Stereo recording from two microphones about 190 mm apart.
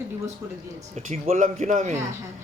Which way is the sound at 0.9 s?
40° right (ahead or behind).